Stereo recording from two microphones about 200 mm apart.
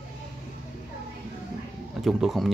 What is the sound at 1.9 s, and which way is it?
Speech, centre (ahead or behind).